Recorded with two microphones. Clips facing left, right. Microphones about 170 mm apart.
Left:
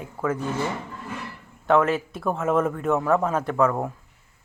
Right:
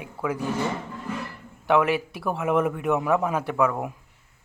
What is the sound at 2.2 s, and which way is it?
Speech, 10° right (ahead or behind).